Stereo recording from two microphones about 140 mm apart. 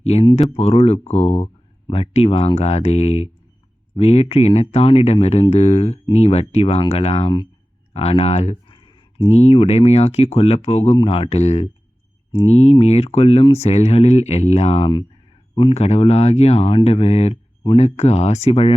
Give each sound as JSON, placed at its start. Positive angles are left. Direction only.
{"t": 0.0, "sound": "speech", "side_deg": 50}
{"t": 8.6, "sound": "a sound", "side_deg": 35}
{"t": 9.3, "sound": "speech", "side_deg": 45}